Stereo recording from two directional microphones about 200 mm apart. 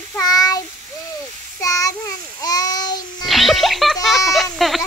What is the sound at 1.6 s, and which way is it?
Child singing, 15° left (ahead or behind).